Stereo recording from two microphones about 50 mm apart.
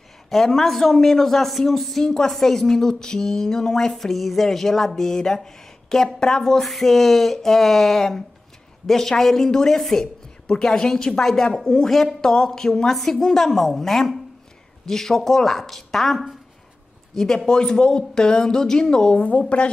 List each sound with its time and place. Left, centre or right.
0.3 s a man's voice: centre
19.1 s speech: left